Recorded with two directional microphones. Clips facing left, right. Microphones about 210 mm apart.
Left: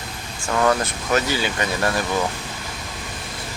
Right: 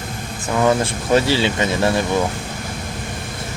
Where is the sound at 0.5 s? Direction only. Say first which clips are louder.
Right 3 dB; 15° right (ahead or behind).